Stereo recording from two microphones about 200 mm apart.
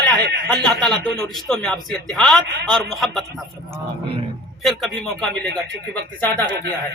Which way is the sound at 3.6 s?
30° right (ahead or behind).